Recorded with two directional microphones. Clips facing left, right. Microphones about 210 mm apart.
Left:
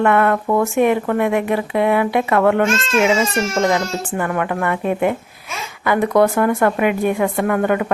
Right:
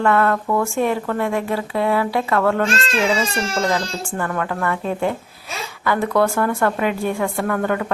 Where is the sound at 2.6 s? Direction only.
35° right (ahead or behind).